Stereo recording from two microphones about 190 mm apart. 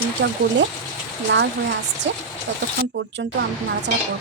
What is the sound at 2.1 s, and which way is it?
Speech, 70° right (ahead or behind).